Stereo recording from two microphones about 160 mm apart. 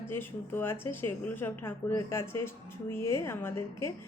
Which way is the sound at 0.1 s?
15° left (ahead or behind).